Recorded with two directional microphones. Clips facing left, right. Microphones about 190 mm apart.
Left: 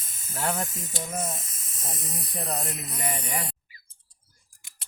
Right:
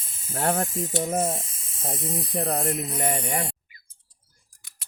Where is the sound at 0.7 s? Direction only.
30° right (ahead or behind).